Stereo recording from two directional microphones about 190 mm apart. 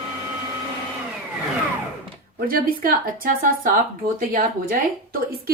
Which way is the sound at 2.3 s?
50° right (ahead or behind).